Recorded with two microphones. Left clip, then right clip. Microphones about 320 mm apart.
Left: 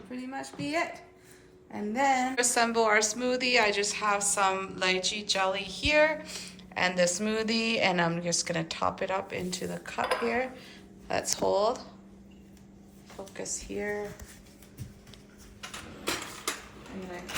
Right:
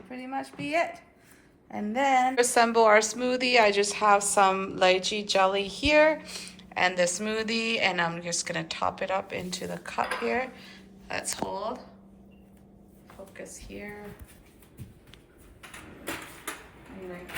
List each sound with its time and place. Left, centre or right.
0.1 s speech: right
1.7 s a sound: right
2.3 s a woman's voice: centre